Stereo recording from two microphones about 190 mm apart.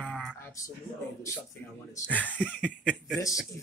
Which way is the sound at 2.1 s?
10° left (ahead or behind).